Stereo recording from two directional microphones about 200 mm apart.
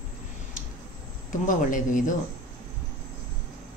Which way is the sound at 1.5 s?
40° left (ahead or behind).